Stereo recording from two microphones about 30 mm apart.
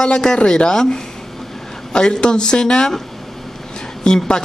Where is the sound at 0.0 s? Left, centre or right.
Left.